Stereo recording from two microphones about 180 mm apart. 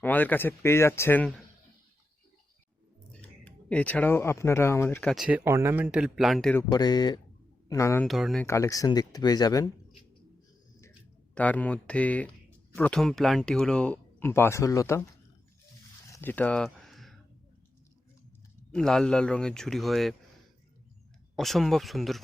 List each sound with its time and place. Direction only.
0.0 s speech: 10° left (ahead or behind)
3.1 s speech: 5° left (ahead or behind)
5.1 s a man's voice: centre (ahead or behind)
5.4 s speech: 15° right (ahead or behind); by 6.6 s centre (ahead or behind)
6.6 s speech: 20° left (ahead or behind)
8.0 s a man's voice: centre (ahead or behind)
8.4 s speech: 15° left (ahead or behind)
11.3 s speech: 10° left (ahead or behind)
16.0 s a sound: 15° left (ahead or behind)
18.7 s a man's voice: 5° left (ahead or behind)
21.3 s a man's voice: centre (ahead or behind)